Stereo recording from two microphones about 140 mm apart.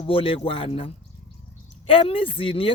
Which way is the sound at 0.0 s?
40° left (ahead or behind).